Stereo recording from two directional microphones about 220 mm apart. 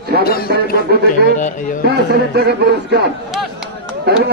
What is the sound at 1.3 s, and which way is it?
Speech, 35° left (ahead or behind).